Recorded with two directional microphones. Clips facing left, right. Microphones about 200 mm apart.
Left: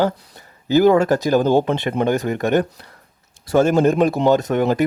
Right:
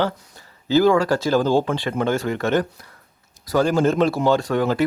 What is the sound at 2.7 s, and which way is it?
Speech, 30° left (ahead or behind).